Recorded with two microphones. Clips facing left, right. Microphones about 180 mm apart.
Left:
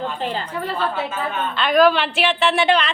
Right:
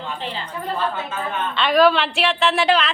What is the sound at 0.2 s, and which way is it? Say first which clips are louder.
Speech: left 6 dB; 45° left (ahead or behind).